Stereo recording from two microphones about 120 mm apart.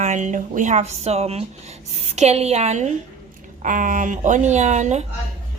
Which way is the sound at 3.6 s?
90° right.